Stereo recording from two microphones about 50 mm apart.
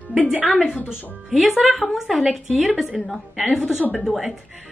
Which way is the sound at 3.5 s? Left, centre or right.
Centre.